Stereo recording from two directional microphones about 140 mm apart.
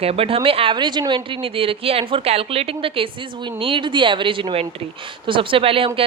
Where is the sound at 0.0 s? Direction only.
45° right (ahead or behind).